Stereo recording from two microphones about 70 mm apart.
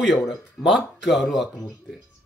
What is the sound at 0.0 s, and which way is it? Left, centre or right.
Speech, centre.